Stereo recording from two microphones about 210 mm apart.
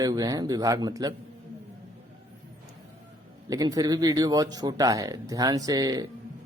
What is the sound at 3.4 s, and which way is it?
Speech, 15° right (ahead or behind).